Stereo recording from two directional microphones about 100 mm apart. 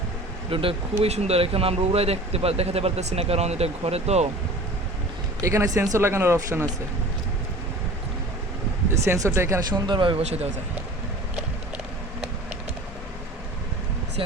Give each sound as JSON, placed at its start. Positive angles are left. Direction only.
{"t": 0.5, "sound": "speech", "side_deg": -65}
{"t": 5.4, "sound": "speech", "side_deg": -30}
{"t": 8.9, "sound": "speech", "side_deg": -30}
{"t": 9.7, "sound": "speech", "side_deg": -50}